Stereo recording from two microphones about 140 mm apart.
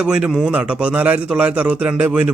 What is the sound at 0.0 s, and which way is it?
A man's voice, 5° right (ahead or behind).